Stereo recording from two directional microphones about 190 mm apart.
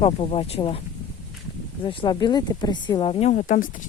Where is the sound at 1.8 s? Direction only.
25° left (ahead or behind).